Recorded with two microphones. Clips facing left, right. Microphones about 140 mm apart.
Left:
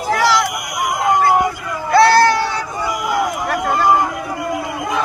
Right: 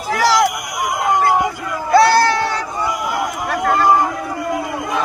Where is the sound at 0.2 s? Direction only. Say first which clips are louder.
Right 3 dB; 40° right (ahead or behind).